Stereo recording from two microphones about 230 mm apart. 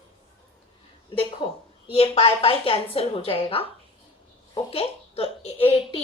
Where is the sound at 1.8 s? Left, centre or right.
Left.